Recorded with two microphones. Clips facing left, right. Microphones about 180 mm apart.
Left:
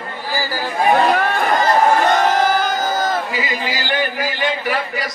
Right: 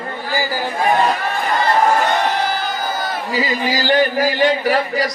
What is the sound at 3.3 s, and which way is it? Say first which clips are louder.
A man's voice: right 4 dB; 40° right (ahead or behind).